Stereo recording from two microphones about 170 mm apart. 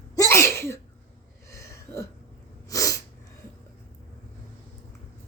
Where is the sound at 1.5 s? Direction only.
15° left (ahead or behind).